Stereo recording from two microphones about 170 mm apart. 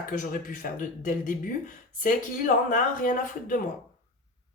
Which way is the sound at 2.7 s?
50° left (ahead or behind).